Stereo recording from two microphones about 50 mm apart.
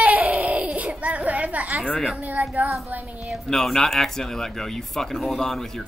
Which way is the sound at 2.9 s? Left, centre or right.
Right.